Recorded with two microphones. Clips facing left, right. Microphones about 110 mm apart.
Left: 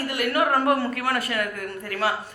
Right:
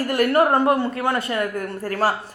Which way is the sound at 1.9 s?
40° right (ahead or behind).